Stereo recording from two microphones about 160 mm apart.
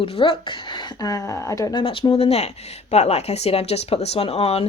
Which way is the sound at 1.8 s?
35° left (ahead or behind).